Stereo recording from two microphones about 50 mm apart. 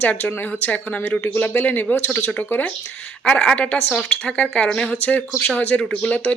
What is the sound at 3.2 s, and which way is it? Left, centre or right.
A woman's voice, centre.